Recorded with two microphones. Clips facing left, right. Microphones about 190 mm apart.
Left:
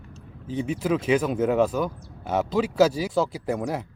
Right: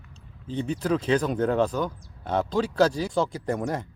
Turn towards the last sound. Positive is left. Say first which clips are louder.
# left 1 dB
turn(degrees=5)  # may be behind; listen again after turning